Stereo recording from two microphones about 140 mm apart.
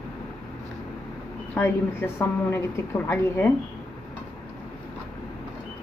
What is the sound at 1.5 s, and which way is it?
Speech, 15° left (ahead or behind).